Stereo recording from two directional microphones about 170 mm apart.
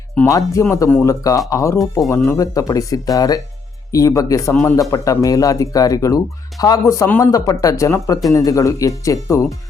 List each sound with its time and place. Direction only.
0.2 s speech: 20° left (ahead or behind)